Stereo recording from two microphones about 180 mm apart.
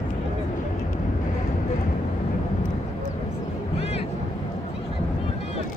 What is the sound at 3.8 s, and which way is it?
Vehicle, 35° left (ahead or behind).